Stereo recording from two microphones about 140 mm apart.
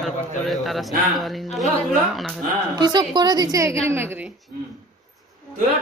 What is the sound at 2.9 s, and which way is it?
A woman's voice, 30° right (ahead or behind).